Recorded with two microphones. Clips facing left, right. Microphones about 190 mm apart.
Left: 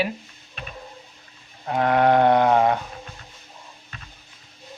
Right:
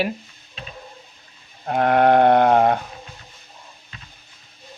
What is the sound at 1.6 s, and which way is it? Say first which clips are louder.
Sheep: right 2 dB; 55° right (ahead or behind).